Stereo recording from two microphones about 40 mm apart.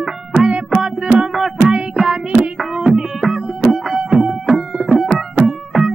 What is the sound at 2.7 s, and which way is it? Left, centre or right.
Music, centre.